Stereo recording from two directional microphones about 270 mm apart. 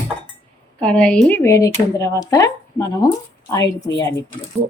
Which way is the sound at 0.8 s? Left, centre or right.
Centre.